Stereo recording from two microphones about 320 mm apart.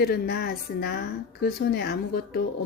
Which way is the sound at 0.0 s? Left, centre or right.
Left.